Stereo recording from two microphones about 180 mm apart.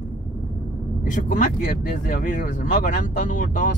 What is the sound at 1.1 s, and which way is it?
Speech, 45° left (ahead or behind).